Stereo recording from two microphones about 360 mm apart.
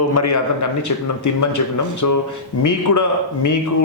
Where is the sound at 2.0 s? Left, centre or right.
Left.